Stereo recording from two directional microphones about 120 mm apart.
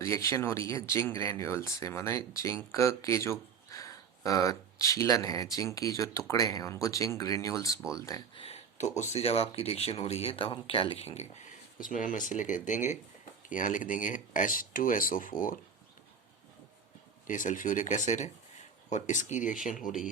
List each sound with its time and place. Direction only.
0.0 s speech: 25° left (ahead or behind)
8.4 s speech: 60° left (ahead or behind); by 14.5 s 90° left
15.3 s speech: 35° left (ahead or behind)
17.2 s speech: 90° left